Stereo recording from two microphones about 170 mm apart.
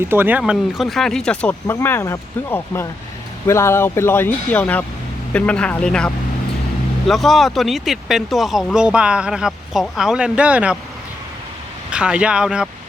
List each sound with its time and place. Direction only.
0.1 s speech: 10° right (ahead or behind); by 6.1 s 5° left (ahead or behind)
7.1 s speech: centre (ahead or behind)
11.9 s speech: 5° right (ahead or behind)